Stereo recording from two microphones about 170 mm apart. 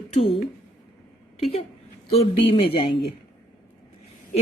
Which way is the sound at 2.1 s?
35° left (ahead or behind).